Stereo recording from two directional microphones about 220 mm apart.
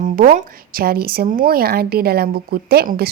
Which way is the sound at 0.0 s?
35° right (ahead or behind).